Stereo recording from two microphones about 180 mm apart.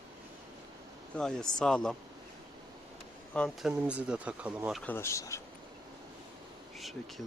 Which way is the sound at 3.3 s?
10° left (ahead or behind).